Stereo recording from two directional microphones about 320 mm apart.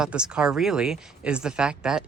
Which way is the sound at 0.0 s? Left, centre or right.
Centre.